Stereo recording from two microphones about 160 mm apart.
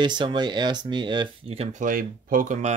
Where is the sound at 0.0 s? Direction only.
30° right (ahead or behind).